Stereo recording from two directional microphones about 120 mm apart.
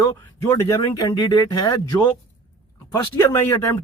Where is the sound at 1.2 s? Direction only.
35° left (ahead or behind).